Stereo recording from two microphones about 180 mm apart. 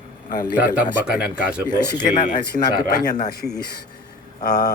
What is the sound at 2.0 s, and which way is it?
Speech, 40° left (ahead or behind).